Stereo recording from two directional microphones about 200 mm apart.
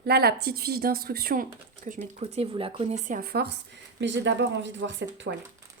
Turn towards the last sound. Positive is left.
turn(degrees=-65)  # may be behind; listen again after turning